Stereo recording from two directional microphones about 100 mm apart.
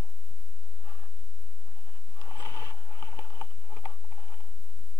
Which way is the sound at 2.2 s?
30° left (ahead or behind).